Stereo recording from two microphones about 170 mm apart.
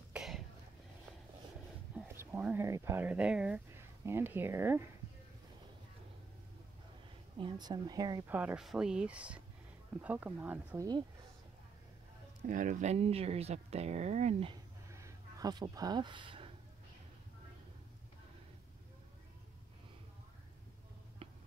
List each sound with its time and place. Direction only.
0.1 s a sound: centre (ahead or behind)
2.0 s speech: 10° right (ahead or behind)
7.3 s a woman's voice: 25° right (ahead or behind)
8.3 s speech: 10° right (ahead or behind)
12.4 s speech: 50° right (ahead or behind)
14.9 s a sound: 15° right (ahead or behind)